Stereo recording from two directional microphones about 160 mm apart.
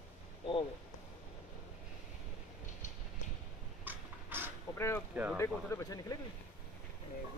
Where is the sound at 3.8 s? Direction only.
10° right (ahead or behind).